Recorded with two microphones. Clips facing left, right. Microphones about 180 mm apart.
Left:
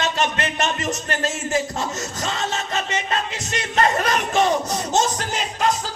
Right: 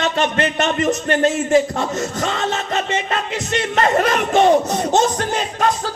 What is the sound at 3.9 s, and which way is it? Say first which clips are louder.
Speech: right 4 dB; 30° right (ahead or behind).